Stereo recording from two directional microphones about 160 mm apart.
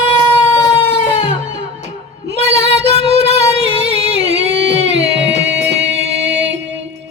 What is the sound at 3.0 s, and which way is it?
Music, 90° right.